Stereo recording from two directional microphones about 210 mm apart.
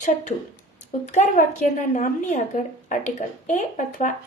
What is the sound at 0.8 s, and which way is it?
Speech, 35° left (ahead or behind).